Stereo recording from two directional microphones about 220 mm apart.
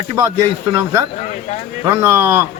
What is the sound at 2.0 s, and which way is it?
Speech, 10° right (ahead or behind).